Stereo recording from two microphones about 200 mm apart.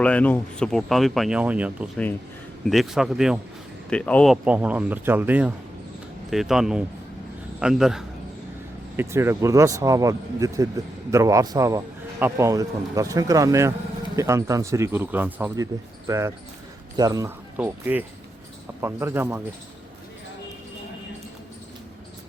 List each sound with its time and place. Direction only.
0.0 s speech: 5° left (ahead or behind)
4.4 s speech: 5° right (ahead or behind)
9.0 s speech: 15° right (ahead or behind)